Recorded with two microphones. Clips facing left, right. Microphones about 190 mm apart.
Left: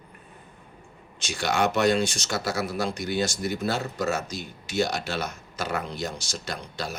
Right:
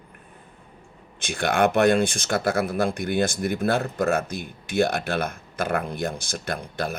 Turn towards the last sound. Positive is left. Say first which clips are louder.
# right 5 dB
turn(degrees=-55)  # may be behind; listen again after turning